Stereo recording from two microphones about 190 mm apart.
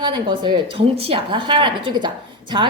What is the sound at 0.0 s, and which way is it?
A woman's voice, 25° right (ahead or behind).